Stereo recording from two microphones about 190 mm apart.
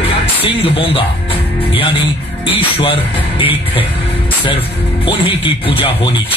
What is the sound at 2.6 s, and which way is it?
Speech, 30° left (ahead or behind).